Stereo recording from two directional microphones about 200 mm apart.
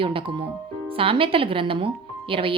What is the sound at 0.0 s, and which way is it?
Speech, 25° right (ahead or behind).